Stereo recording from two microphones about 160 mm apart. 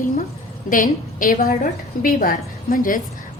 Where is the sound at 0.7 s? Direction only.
55° left (ahead or behind).